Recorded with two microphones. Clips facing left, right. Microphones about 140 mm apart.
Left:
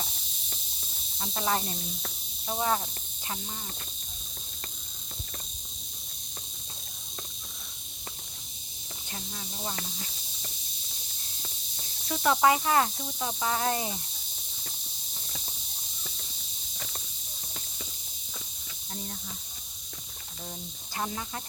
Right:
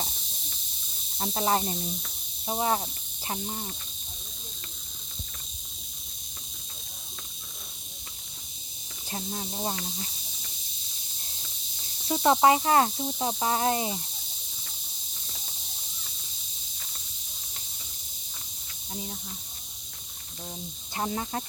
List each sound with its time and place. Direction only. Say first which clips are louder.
1.2 s speech: right 4 dB; 30° right (ahead or behind)
9.0 s speech: right 7 dB; 35° right (ahead or behind)
12.0 s speech: right 3 dB; 25° right (ahead or behind)
20.9 s speech: right 4 dB; 30° right (ahead or behind)